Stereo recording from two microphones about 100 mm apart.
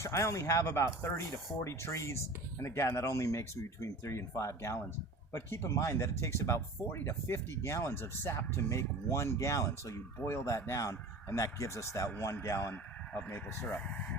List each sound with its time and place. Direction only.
0.0 s speech: 30° left (ahead or behind); by 14.2 s 10° left (ahead or behind)